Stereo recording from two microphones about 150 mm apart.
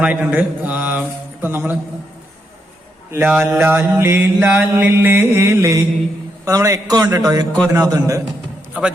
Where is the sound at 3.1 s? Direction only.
15° right (ahead or behind).